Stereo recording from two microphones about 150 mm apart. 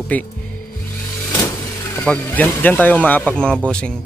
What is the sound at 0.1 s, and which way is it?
Speech, 10° left (ahead or behind).